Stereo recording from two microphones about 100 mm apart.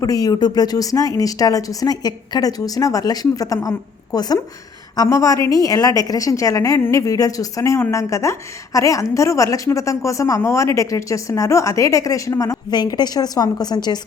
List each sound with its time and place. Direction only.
0.0 s a woman's voice: 35° left (ahead or behind)